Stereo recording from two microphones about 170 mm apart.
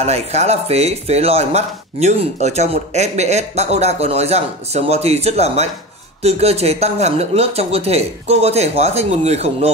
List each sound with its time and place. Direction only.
0.0 s speech: 40° right (ahead or behind)